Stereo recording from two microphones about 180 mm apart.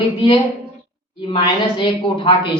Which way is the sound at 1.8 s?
25° left (ahead or behind).